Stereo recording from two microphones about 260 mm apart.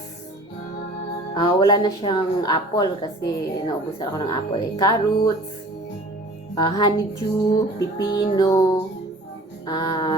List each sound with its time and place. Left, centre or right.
1.3 s speech: centre
6.5 s speech: centre